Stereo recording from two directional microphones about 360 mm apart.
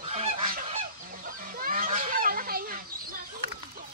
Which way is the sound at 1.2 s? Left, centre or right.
Right.